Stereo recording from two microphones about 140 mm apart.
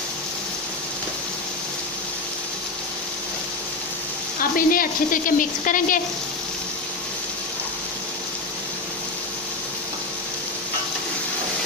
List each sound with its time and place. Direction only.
4.4 s speech: 90° left